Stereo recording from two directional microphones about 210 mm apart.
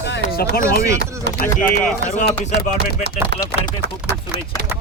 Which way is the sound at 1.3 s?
55° right (ahead or behind).